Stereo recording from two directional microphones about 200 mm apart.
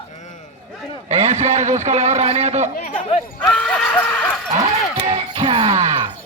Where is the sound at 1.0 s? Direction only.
35° right (ahead or behind).